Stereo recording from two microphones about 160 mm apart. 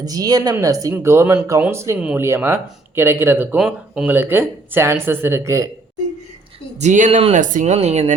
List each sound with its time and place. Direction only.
0.0 s speech: 25° right (ahead or behind)
6.7 s speech: 50° right (ahead or behind)
7.2 s speech: 40° right (ahead or behind)
7.4 s speech: 50° right (ahead or behind)